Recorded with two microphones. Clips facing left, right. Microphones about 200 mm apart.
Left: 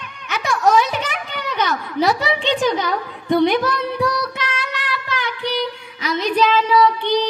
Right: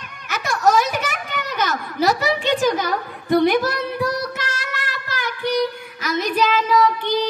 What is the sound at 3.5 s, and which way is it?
Child singing, 45° right (ahead or behind).